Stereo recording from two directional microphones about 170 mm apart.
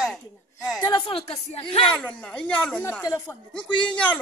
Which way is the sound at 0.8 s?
30° left (ahead or behind).